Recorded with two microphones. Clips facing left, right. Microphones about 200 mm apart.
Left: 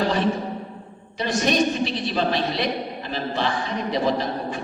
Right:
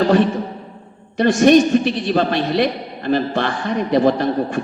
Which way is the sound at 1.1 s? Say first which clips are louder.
Right 11 dB; 50° right (ahead or behind).